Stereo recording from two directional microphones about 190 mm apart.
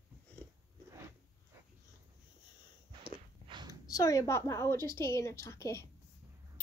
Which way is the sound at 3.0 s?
25° right (ahead or behind).